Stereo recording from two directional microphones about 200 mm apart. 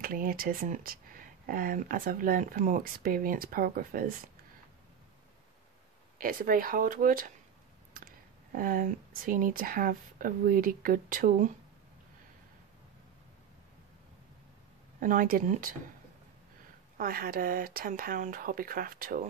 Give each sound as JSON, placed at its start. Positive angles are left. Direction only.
{"t": 0.0, "sound": "speech", "side_deg": -45}
{"t": 6.1, "sound": "speech", "side_deg": -45}
{"t": 8.5, "sound": "speech", "side_deg": -45}
{"t": 15.0, "sound": "speech", "side_deg": -45}
{"t": 16.9, "sound": "speech", "side_deg": -45}